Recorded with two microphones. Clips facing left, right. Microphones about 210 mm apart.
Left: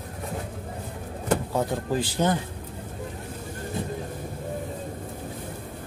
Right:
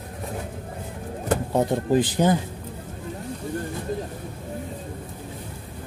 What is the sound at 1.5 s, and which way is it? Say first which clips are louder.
Speech: right 5 dB; 20° right (ahead or behind).